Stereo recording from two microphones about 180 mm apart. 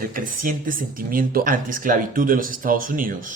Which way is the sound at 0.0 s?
50° right (ahead or behind).